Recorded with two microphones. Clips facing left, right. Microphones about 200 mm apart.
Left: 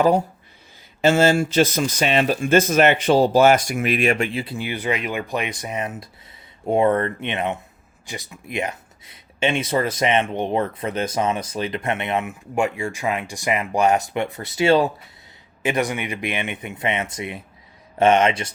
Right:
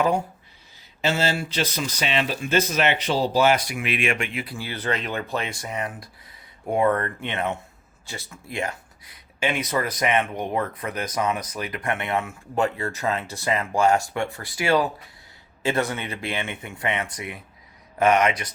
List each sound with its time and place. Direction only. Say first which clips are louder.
1.0 s speech: left 8 dB; 50° left (ahead or behind); by 18.5 s 25° left (ahead or behind)